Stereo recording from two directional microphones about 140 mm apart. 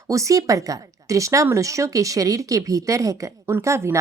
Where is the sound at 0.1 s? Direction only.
25° right (ahead or behind).